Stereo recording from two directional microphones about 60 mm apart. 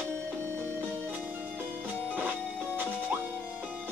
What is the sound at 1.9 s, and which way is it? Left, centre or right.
Music, right.